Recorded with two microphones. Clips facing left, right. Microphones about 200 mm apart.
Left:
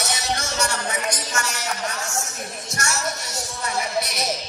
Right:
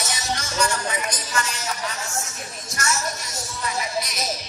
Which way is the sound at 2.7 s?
70° left (ahead or behind).